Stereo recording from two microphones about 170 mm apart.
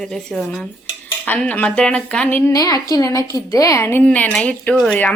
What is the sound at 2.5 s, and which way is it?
A woman's voice, 20° left (ahead or behind).